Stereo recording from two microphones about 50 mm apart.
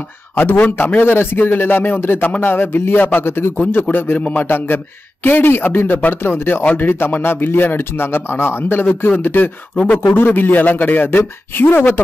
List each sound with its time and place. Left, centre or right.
0.4 s speech: left
6.6 s speech: left
6.9 s speech: left